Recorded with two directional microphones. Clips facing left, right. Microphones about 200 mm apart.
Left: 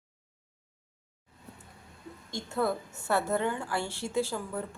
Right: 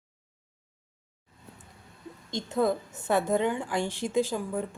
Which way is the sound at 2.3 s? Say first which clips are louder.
Right 4 dB; 20° right (ahead or behind).